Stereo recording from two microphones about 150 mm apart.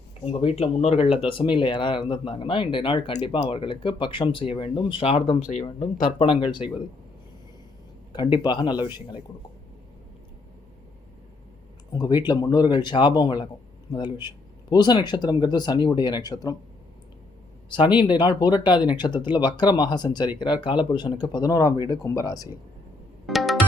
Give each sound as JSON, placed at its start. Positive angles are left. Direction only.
{"t": 0.3, "sound": "speech", "side_deg": 40}
{"t": 8.1, "sound": "speech", "side_deg": 30}
{"t": 11.9, "sound": "speech", "side_deg": 25}
{"t": 17.7, "sound": "speech", "side_deg": 30}
{"t": 23.2, "sound": "music", "side_deg": 0}